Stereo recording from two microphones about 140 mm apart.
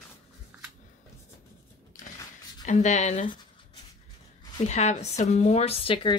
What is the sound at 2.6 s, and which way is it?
Speech, 60° left (ahead or behind).